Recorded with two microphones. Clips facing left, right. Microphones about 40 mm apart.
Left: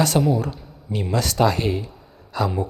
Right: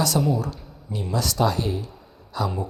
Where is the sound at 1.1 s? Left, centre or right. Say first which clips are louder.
Left 3 dB; left.